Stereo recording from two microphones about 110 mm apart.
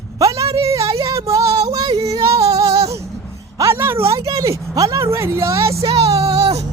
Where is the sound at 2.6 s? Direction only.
65° right (ahead or behind).